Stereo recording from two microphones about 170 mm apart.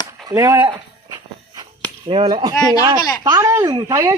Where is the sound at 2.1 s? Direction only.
30° right (ahead or behind).